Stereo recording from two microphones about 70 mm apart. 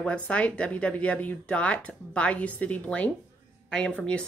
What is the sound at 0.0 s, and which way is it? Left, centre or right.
Speech, centre.